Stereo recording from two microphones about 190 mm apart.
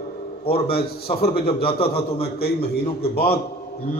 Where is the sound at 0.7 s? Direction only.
55° left (ahead or behind).